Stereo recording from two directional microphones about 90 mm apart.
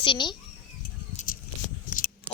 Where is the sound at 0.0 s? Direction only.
65° left (ahead or behind).